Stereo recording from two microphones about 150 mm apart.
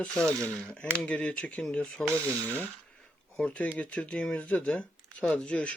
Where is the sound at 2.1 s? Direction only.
15° right (ahead or behind).